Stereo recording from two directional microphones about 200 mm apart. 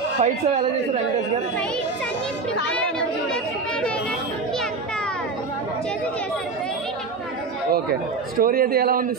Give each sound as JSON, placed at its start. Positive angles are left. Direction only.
{"t": 0.2, "sound": "speech", "side_deg": -35}
{"t": 8.4, "sound": "a man's voice", "side_deg": -45}